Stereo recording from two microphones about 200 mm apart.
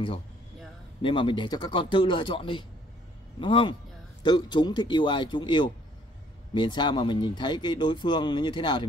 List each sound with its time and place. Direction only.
1.0 s speech: 25° left (ahead or behind)